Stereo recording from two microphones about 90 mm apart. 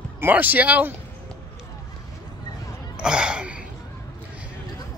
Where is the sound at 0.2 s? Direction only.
20° right (ahead or behind).